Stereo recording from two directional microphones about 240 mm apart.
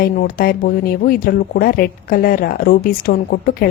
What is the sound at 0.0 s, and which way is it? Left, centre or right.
A woman's voice, left.